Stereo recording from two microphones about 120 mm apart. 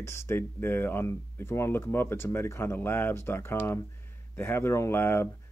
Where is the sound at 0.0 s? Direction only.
20° left (ahead or behind).